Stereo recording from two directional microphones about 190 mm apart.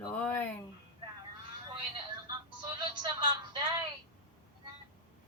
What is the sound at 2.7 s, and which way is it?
Music, 25° right (ahead or behind).